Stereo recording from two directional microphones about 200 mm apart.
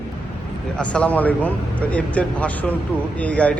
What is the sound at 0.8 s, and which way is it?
A man's voice, 5° left (ahead or behind).